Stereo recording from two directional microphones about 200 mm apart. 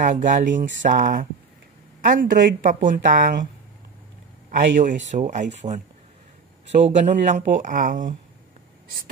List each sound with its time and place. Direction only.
0.0 s speech: 40° right (ahead or behind)
4.5 s speech: 40° right (ahead or behind)
7.1 s speech: 35° right (ahead or behind)